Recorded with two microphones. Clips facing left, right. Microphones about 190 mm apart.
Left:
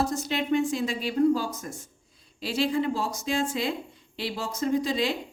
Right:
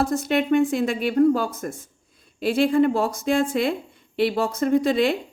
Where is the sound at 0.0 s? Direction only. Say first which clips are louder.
Right 6 dB; 55° right (ahead or behind).